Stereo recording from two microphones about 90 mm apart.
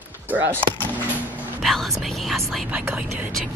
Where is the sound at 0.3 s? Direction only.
20° right (ahead or behind).